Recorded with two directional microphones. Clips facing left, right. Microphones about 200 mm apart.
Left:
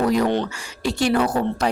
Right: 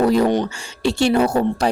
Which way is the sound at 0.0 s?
30° right (ahead or behind).